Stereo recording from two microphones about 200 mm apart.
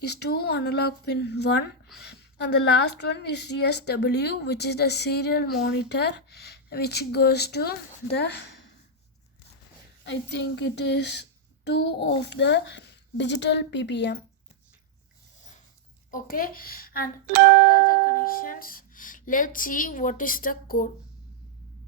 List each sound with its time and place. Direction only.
0.0 s a woman's voice: 55° left (ahead or behind)
10.0 s a woman's voice: 60° left (ahead or behind)
16.1 s speech: 45° left (ahead or behind)
17.8 s music: 45° left (ahead or behind)